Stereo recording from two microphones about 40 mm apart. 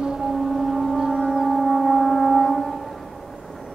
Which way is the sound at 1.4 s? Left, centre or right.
Centre.